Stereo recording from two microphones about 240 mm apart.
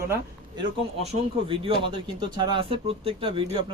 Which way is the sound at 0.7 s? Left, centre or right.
Right.